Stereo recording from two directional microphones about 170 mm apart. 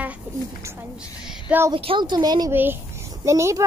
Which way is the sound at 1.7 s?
30° right (ahead or behind).